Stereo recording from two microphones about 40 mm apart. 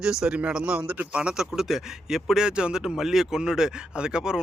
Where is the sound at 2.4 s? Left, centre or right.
Right.